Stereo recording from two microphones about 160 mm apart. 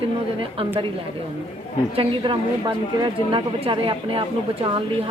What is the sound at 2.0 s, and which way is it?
Speech, 30° right (ahead or behind).